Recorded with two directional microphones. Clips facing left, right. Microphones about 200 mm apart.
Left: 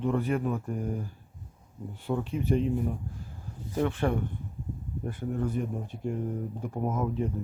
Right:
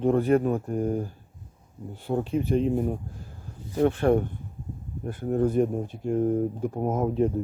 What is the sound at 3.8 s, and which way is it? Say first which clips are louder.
Speech: right 7 dB; 45° right (ahead or behind).